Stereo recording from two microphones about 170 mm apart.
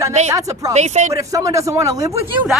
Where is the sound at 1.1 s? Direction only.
20° right (ahead or behind).